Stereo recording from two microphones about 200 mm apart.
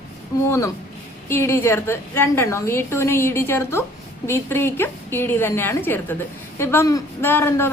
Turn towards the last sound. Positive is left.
turn(degrees=10)  # may be behind; listen again after turning